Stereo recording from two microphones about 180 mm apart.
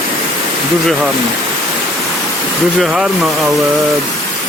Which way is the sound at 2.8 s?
Centre (ahead or behind).